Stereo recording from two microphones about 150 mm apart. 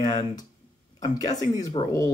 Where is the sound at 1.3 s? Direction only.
25° left (ahead or behind).